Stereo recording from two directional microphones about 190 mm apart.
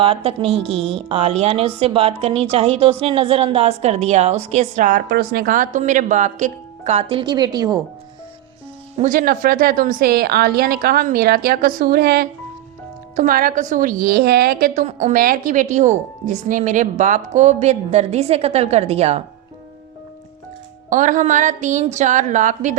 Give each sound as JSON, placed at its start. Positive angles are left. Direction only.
{"t": 0.0, "sound": "a woman's voice", "side_deg": -30}
{"t": 9.0, "sound": "a woman's voice", "side_deg": -45}
{"t": 20.9, "sound": "a woman's voice", "side_deg": -40}